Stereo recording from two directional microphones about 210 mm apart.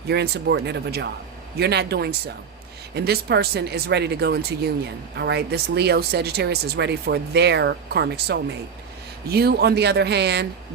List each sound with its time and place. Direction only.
0.1 s speech: 55° right (ahead or behind)